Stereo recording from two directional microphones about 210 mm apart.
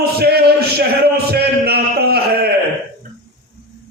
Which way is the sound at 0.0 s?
50° right (ahead or behind).